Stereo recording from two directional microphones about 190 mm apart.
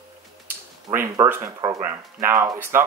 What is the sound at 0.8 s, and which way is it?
Speech, 15° right (ahead or behind).